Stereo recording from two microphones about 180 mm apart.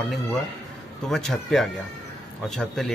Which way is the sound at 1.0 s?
Centre (ahead or behind).